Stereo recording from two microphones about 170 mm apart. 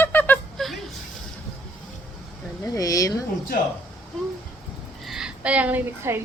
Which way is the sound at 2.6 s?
20° left (ahead or behind).